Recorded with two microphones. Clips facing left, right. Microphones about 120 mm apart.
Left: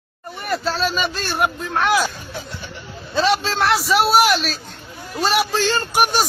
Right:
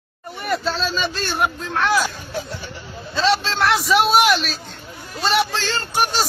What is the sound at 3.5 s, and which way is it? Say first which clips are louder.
A man's voice: even; centre (ahead or behind).